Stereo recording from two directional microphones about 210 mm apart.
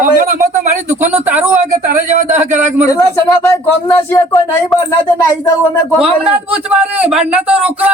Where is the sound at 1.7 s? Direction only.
35° right (ahead or behind).